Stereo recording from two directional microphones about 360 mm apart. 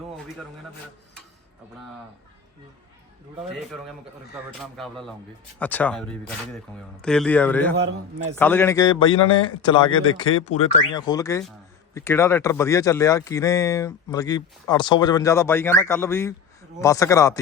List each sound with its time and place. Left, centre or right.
4.8 s speech: centre